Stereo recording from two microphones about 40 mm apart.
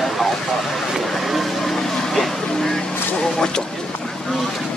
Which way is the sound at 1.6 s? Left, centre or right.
Centre.